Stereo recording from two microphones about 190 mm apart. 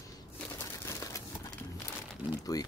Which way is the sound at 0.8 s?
15° left (ahead or behind).